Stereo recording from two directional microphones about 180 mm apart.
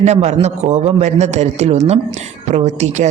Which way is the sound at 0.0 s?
40° right (ahead or behind).